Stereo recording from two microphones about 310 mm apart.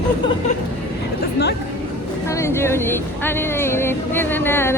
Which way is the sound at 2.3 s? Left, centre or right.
Centre.